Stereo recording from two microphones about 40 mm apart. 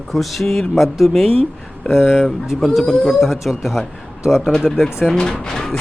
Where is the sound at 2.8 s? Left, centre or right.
Centre.